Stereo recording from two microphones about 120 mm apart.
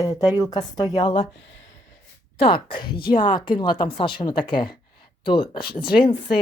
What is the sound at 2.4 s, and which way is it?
Speech, 45° left (ahead or behind).